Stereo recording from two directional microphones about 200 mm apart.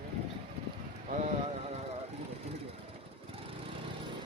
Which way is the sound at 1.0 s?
35° right (ahead or behind).